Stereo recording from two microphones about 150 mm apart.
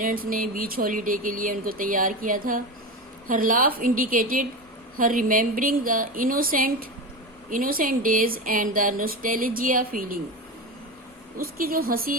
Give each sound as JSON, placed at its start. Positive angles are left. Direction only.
{"t": 0.0, "sound": "speech", "side_deg": -70}
{"t": 11.3, "sound": "speech", "side_deg": -75}